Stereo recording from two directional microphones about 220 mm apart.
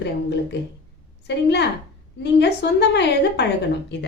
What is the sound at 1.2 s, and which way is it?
A woman's voice, 50° left (ahead or behind).